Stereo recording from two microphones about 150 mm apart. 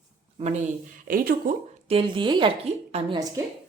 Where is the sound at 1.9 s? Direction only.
35° right (ahead or behind).